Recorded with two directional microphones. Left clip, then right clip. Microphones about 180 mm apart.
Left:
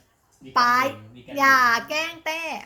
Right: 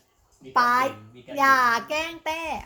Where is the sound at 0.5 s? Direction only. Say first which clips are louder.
Left 1 dB; 30° right (ahead or behind).